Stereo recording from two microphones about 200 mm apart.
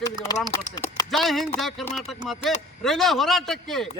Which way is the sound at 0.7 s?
20° left (ahead or behind).